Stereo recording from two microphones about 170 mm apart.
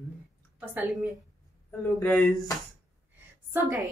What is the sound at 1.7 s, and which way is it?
Speech, 5° left (ahead or behind).